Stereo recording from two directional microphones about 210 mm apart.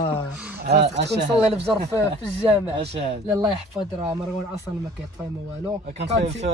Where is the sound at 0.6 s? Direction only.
50° right (ahead or behind).